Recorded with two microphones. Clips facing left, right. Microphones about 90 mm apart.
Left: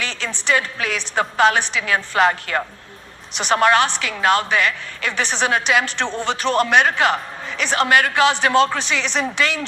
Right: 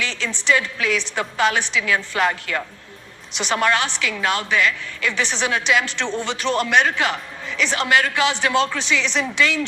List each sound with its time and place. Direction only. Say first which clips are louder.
0.0 s a man's voice: right 1 dB; 45° left (ahead or behind)